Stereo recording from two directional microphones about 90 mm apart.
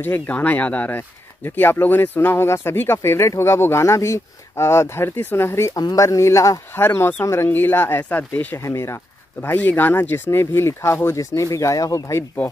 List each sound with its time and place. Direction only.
0.0 s speech: 20° left (ahead or behind)
5.8 s speech: 45° left (ahead or behind)
6.8 s speech: 25° left (ahead or behind)
8.6 s speech: 35° left (ahead or behind)
9.4 s speech: 20° left (ahead or behind)